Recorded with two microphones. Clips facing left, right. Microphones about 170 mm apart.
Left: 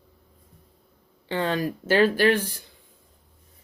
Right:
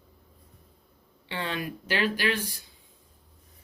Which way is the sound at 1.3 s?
45° left (ahead or behind).